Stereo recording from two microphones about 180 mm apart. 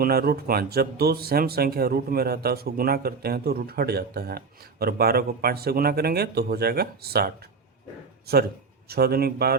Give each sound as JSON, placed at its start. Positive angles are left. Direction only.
{"t": 0.0, "sound": "speech", "side_deg": -60}
{"t": 8.9, "sound": "speech", "side_deg": -60}